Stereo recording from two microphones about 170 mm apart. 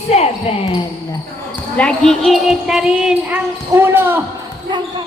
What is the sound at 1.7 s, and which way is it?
Speech, 5° left (ahead or behind).